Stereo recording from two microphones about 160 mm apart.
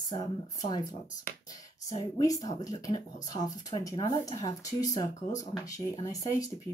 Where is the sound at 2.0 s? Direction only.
25° left (ahead or behind).